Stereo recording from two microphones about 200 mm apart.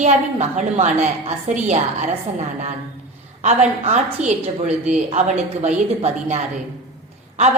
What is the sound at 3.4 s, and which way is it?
A woman's voice, 35° right (ahead or behind).